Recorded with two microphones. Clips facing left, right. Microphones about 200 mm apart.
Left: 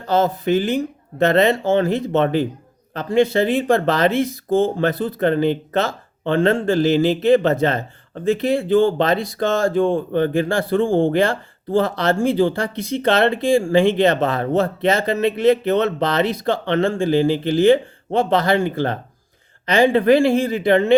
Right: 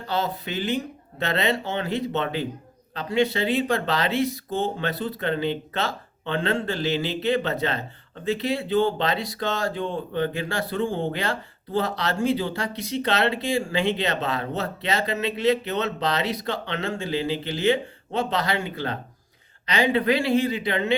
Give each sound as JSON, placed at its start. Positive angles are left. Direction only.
{"t": 0.1, "sound": "speech", "side_deg": 45}
{"t": 10.8, "sound": "speech", "side_deg": 90}
{"t": 11.2, "sound": "speech", "side_deg": 50}